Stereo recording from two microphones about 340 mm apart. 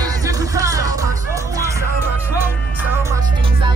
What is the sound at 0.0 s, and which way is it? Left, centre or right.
Music, centre.